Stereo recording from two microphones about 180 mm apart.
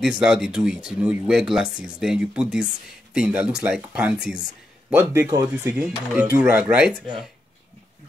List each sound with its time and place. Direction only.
0.0 s speech: centre (ahead or behind)